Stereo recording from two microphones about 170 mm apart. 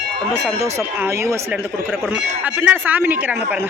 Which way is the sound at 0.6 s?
15° right (ahead or behind).